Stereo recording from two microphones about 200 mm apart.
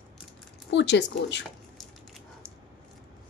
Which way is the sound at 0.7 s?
60° left (ahead or behind).